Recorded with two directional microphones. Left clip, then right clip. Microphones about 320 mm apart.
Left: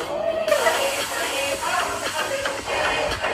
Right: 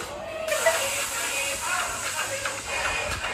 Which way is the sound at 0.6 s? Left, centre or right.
Left.